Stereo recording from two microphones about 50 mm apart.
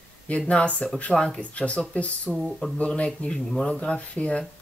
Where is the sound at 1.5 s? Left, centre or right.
Left.